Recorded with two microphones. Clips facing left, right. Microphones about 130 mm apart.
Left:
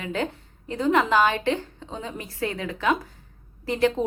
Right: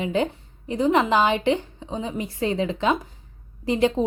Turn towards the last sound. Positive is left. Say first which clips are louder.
# right 2 dB
turn(degrees=-20)  # may be behind; listen again after turning